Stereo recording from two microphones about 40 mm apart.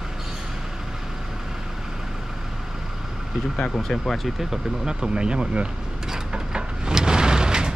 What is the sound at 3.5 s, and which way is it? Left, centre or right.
Speech, centre.